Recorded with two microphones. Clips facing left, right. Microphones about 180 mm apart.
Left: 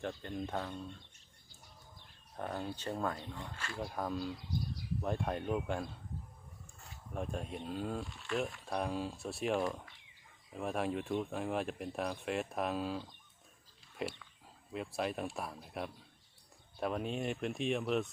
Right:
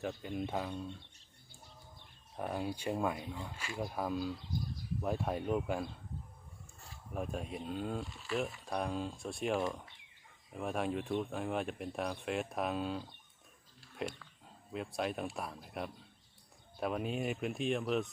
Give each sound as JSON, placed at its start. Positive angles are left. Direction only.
{"t": 0.0, "sound": "speech", "side_deg": -5}
{"t": 2.3, "sound": "speech", "side_deg": -10}
{"t": 7.1, "sound": "speech", "side_deg": -5}